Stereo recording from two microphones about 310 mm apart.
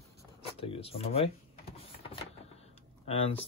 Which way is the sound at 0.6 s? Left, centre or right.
Centre.